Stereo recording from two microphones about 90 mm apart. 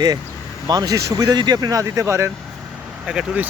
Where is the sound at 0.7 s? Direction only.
45° right (ahead or behind).